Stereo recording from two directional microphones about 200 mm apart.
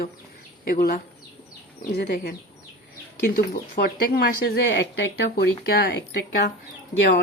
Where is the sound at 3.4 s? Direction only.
45° left (ahead or behind).